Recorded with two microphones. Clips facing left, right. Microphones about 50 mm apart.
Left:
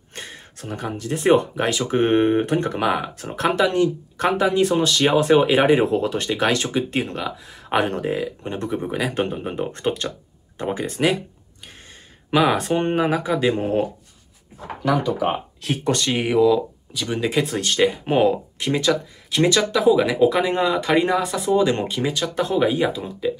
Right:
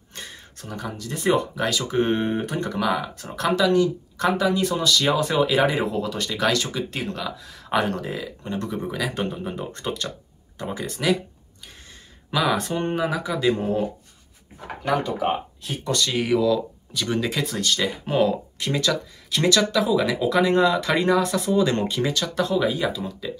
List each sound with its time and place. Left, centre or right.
0.1 s speech: left
12.3 s speech: left
15.6 s speech: left; by 22.3 s centre
22.3 s speech: left